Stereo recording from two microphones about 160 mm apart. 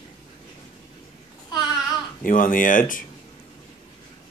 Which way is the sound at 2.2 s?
60° left (ahead or behind).